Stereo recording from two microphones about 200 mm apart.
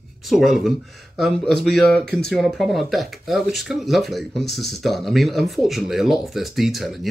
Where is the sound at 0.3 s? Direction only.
Centre (ahead or behind).